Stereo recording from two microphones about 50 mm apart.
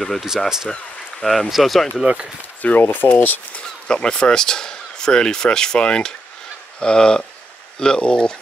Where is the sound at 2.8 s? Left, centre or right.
Left.